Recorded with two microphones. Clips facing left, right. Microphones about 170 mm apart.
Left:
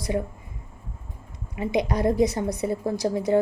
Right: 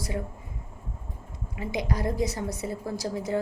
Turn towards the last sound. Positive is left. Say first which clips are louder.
# left 7 dB
turn(degrees=20)  # may be behind; listen again after turning